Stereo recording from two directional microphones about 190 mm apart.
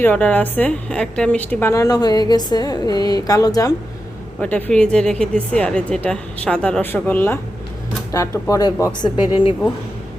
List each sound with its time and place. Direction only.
0.0 s a woman's voice: 10° left (ahead or behind)
4.4 s a woman's voice: 10° left (ahead or behind); by 9.6 s 30° left (ahead or behind)